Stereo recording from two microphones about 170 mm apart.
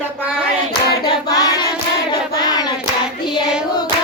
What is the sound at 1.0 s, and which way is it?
Hands, 20° left (ahead or behind).